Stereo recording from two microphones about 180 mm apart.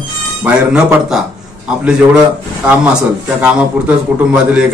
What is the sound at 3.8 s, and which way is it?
Speech, 5° right (ahead or behind).